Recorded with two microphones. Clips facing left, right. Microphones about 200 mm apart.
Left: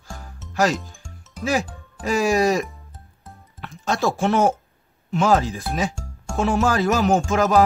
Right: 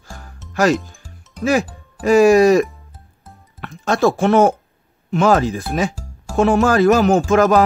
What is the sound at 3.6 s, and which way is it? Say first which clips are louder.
Speech: right 6 dB; 60° right (ahead or behind).